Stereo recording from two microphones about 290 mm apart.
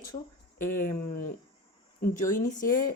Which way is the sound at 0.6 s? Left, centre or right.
Left.